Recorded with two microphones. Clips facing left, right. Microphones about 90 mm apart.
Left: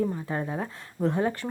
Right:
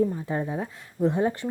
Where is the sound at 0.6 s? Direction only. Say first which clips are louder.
Right 3 dB; 15° right (ahead or behind).